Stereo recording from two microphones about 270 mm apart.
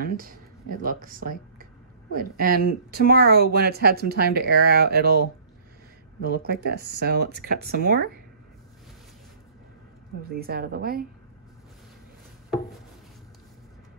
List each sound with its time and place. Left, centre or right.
0.0 s speech: right
10.3 s speech: right